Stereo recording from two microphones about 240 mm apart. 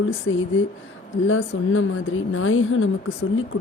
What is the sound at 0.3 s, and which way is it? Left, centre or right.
Speech, left.